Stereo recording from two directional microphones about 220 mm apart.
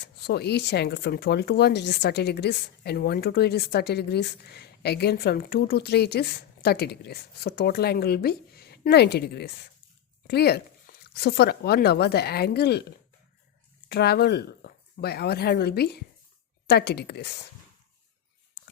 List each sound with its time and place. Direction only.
0.0 s speech: 50° left (ahead or behind)
13.8 s speech: 45° left (ahead or behind)